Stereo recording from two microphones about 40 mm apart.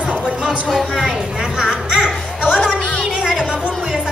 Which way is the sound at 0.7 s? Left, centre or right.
Centre.